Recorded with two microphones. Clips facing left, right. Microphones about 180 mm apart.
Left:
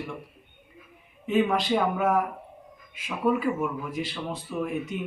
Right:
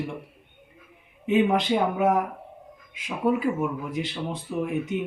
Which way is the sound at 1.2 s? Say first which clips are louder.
Right 2 dB; 20° right (ahead or behind).